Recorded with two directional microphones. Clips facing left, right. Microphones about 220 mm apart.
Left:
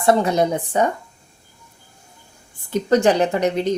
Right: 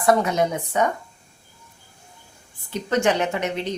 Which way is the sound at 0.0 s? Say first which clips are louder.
Left 3 dB; 30° left (ahead or behind).